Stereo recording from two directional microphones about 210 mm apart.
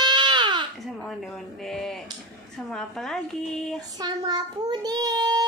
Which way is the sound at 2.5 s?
Centre (ahead or behind).